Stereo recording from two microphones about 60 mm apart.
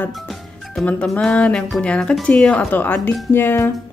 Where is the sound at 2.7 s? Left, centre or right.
Left.